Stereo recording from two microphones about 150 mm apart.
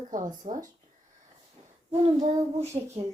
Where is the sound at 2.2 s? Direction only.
45° right (ahead or behind).